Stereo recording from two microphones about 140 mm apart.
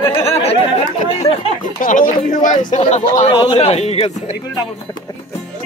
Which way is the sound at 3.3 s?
40° left (ahead or behind).